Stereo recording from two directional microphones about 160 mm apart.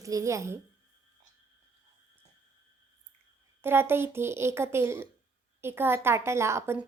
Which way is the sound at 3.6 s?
15° right (ahead or behind).